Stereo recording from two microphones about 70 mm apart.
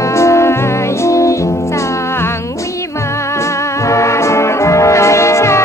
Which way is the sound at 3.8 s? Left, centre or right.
Left.